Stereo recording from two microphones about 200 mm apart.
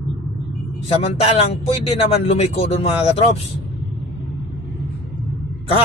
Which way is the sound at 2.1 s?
30° left (ahead or behind).